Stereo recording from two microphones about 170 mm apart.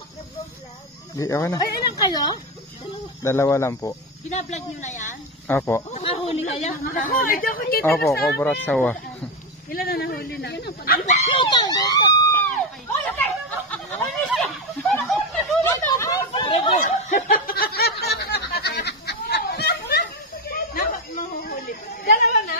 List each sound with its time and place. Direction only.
1.1 s speech: 20° left (ahead or behind)
4.3 s a woman's voice: 40° left (ahead or behind)
5.5 s speech: 10° left (ahead or behind)
5.9 s a woman's voice: 40° left (ahead or behind); by 7.8 s 55° left (ahead or behind)
7.8 s speech: 15° left (ahead or behind)
9.7 s speech: 60° left (ahead or behind)
11.1 s speech: 40° left (ahead or behind)
11.3 s speech: 25° left (ahead or behind)
13.0 s a sound: 10° left (ahead or behind)
14.3 s snicker: 5° left (ahead or behind)
15.9 s hubbub: 20° left (ahead or behind)
16.8 s snicker: 55° left (ahead or behind); by 20.0 s 75° left (ahead or behind)
20.4 s a sound: 60° left (ahead or behind)
21.4 s chatter: 60° left (ahead or behind)